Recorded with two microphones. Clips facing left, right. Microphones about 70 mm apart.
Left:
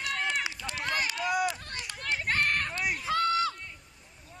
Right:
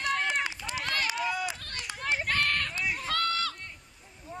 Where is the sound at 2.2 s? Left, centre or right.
Left.